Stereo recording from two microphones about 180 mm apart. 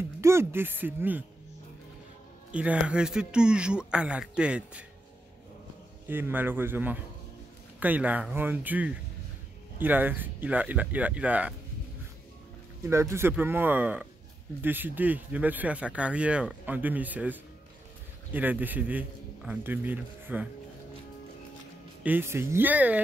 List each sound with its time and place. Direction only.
0.2 s speech: 15° right (ahead or behind)
2.5 s speech: 5° right (ahead or behind)
6.0 s speech: 10° right (ahead or behind)
12.8 s speech: 15° right (ahead or behind)
22.0 s speech: 10° right (ahead or behind)